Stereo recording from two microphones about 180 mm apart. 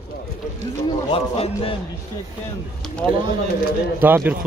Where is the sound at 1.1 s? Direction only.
30° left (ahead or behind).